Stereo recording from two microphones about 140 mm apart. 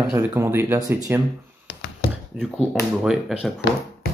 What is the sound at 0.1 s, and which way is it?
Speech, 15° right (ahead or behind).